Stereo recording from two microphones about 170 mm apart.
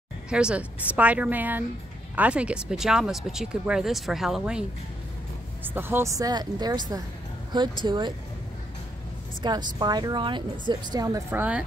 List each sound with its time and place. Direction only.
0.3 s speech: 5° right (ahead or behind); by 8.1 s 25° right (ahead or behind)
9.4 s speech: 25° right (ahead or behind)